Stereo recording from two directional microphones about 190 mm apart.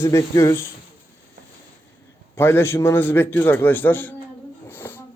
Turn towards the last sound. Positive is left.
turn(degrees=10)  # may be behind; listen again after turning